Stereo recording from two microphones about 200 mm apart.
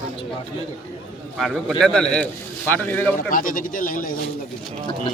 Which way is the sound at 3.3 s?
45° left (ahead or behind).